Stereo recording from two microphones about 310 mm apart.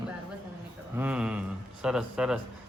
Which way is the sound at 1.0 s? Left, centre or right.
Centre.